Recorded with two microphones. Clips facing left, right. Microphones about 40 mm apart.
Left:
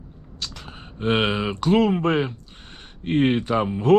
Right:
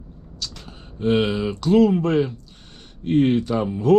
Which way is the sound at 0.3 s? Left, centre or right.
Left.